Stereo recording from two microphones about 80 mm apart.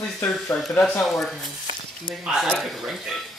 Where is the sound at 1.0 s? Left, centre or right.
Centre.